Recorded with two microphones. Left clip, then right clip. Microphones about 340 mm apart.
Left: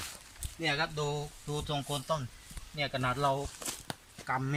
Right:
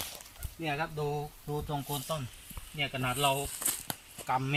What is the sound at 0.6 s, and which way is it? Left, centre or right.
Speech, centre.